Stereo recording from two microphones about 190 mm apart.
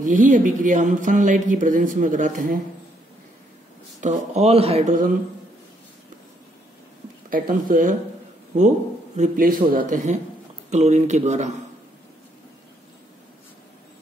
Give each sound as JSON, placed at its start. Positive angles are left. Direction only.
{"t": 0.0, "sound": "a woman's voice", "side_deg": -40}
{"t": 4.0, "sound": "a woman's voice", "side_deg": -35}
{"t": 7.2, "sound": "a woman's voice", "side_deg": -45}